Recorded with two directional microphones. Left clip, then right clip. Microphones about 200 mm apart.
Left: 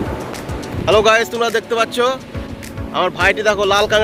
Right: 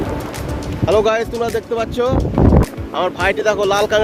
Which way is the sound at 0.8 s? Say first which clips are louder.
Left 3 dB; 5° right (ahead or behind).